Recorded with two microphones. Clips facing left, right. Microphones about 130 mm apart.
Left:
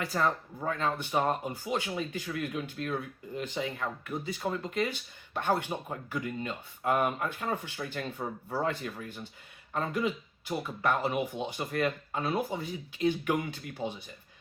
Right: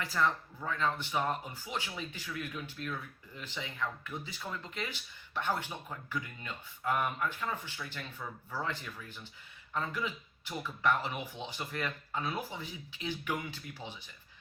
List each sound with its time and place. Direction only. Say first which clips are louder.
0.0 s speech: left 2 dB; 45° left (ahead or behind)